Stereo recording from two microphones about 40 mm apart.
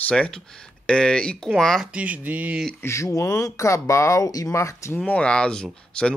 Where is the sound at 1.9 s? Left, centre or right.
Right.